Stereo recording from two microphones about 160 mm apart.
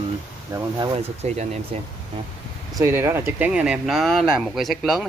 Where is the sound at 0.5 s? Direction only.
20° right (ahead or behind).